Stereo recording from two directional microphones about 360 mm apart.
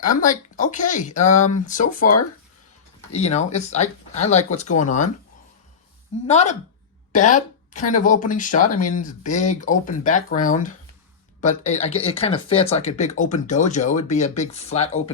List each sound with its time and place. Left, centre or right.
0.1 s speech: left
3.1 s speech: centre
6.2 s speech: centre